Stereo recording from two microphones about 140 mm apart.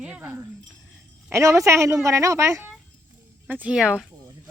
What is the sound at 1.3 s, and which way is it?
A woman's voice, 20° right (ahead or behind).